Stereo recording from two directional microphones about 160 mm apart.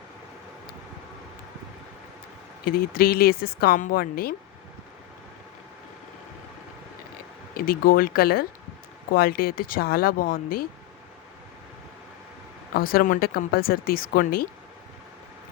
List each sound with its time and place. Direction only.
2.6 s speech: 70° left (ahead or behind)
7.5 s speech: 65° left (ahead or behind)
12.7 s speech: 65° left (ahead or behind)